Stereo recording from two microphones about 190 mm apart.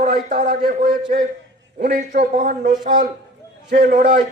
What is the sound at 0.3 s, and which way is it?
A man's voice, 40° right (ahead or behind).